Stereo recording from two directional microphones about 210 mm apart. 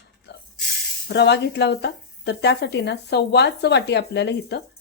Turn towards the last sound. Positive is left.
turn(degrees=55)  # may be behind; listen again after turning